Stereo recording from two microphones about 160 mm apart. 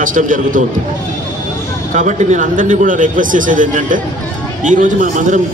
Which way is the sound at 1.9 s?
50° right (ahead or behind).